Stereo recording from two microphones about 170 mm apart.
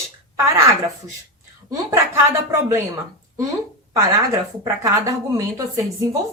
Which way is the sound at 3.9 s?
20° right (ahead or behind).